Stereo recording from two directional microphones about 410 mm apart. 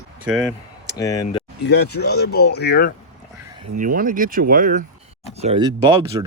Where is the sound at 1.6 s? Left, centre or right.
Left.